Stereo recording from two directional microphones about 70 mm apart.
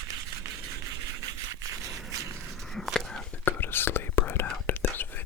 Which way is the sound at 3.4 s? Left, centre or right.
Left.